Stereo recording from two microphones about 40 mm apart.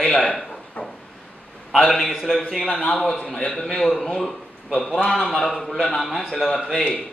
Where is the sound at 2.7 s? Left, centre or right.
Centre.